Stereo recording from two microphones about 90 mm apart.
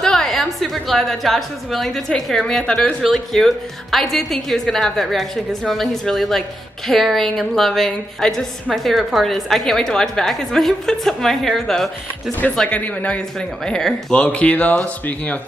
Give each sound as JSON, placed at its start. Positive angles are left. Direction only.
{"t": 0.0, "sound": "a woman's voice", "side_deg": 5}